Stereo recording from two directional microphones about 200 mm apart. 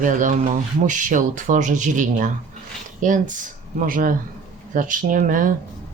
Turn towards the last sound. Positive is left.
turn(degrees=-40)  # may be behind; listen again after turning